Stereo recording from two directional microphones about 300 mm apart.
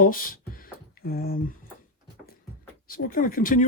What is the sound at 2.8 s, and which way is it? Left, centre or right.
Speech, left.